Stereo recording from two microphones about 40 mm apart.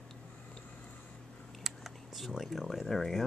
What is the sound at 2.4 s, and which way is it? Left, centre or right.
Speech, centre.